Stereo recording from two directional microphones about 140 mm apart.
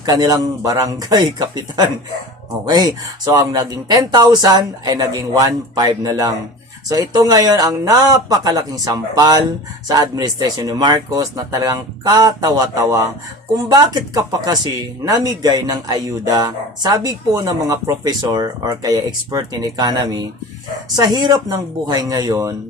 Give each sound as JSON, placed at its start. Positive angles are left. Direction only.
{"t": 0.0, "sound": "speech", "side_deg": -30}